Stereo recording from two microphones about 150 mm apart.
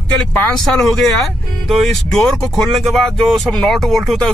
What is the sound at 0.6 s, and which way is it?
Speech, centre (ahead or behind).